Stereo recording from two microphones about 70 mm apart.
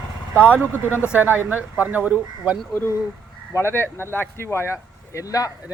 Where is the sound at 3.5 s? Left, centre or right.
Left.